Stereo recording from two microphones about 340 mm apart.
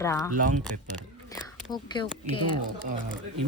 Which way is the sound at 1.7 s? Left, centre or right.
Centre.